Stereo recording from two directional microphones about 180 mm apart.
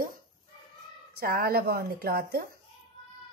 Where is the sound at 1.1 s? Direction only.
55° right (ahead or behind).